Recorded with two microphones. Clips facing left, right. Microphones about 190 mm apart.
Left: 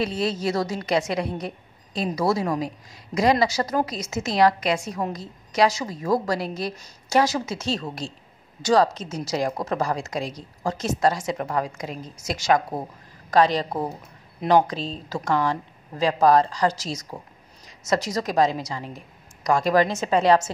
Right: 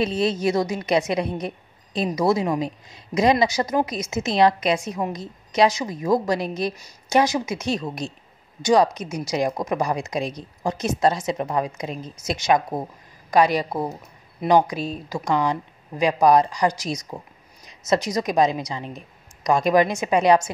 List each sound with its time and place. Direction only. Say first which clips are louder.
0.0 s a woman's voice: right 3 dB; 20° right (ahead or behind)